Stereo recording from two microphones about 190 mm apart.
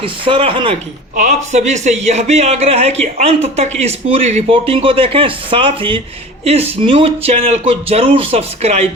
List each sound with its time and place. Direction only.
0.0 s speech: 30° right (ahead or behind)
1.1 s speech: 40° right (ahead or behind)